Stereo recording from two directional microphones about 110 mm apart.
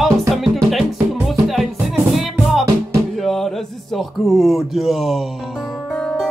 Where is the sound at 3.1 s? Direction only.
Centre (ahead or behind).